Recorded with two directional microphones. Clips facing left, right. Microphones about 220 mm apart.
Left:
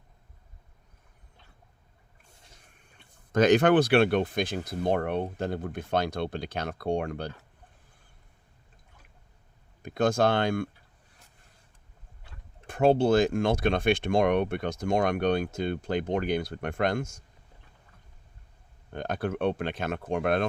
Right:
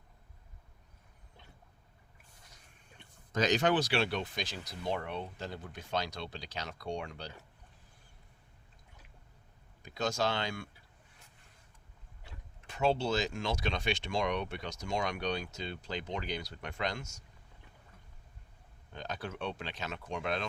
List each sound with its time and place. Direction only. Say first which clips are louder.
3.3 s speech: left 9 dB; 55° left (ahead or behind)
9.8 s speech: left 9 dB; 55° left (ahead or behind)
12.2 s speech: left 6 dB; 50° left (ahead or behind)
18.9 s speech: left 10 dB; 55° left (ahead or behind)